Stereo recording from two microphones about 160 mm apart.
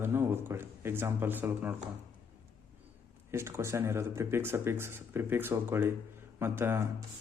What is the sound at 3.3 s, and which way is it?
A man's voice, 15° right (ahead or behind).